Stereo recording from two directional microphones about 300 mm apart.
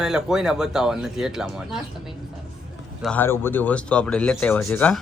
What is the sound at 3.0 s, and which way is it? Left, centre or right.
A woman's voice, centre.